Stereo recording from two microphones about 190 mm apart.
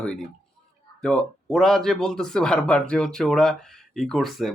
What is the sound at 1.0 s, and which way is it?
Speech, 5° left (ahead or behind).